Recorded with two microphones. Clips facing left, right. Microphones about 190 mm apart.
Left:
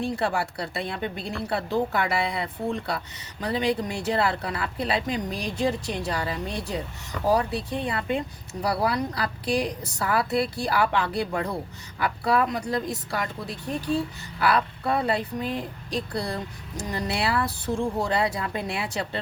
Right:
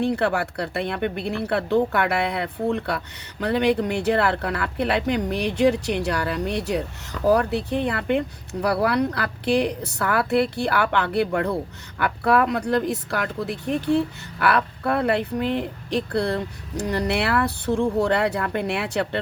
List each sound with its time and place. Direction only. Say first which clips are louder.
0.0 s speech: right 4 dB; 65° right (ahead or behind)